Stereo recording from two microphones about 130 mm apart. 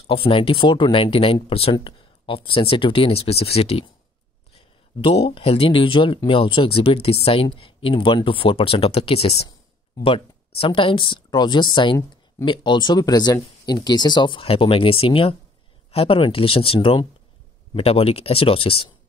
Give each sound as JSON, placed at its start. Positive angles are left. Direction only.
{"t": 0.0, "sound": "speech", "side_deg": 45}